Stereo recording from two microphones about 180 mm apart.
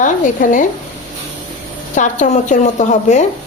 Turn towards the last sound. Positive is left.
turn(degrees=40)  # may be behind; listen again after turning